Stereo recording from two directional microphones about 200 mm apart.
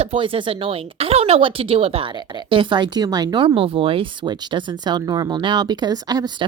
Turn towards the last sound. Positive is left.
turn(degrees=-20)  # may be behind; listen again after turning